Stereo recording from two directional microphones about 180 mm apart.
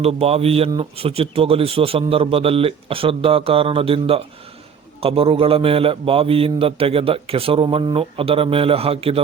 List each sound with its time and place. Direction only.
0.0 s a man's voice: 35° right (ahead or behind)